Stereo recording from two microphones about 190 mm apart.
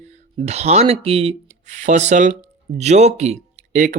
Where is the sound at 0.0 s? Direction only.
35° right (ahead or behind).